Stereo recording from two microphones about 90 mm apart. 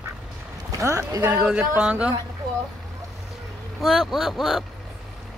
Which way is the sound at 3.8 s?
Centre (ahead or behind).